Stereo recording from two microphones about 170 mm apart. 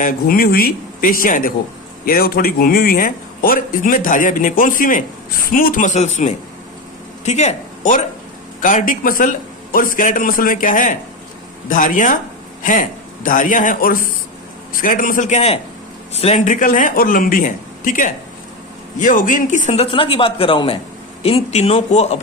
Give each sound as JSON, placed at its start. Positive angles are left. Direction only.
{"t": 0.0, "sound": "a man's voice", "side_deg": 60}